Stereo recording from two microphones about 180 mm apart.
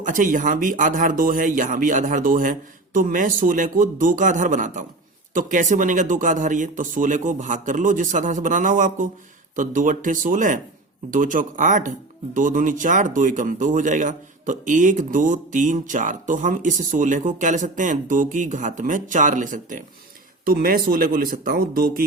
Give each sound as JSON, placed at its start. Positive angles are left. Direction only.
{"t": 0.0, "sound": "speech", "side_deg": -45}